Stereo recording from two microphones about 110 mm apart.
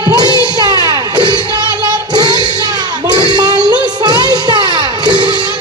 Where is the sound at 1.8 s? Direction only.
40° right (ahead or behind).